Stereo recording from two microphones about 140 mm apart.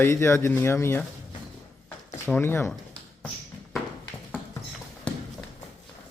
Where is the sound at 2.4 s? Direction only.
15° left (ahead or behind).